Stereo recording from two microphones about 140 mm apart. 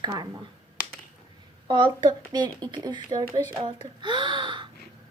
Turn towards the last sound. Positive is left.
turn(degrees=-35)  # may be behind; listen again after turning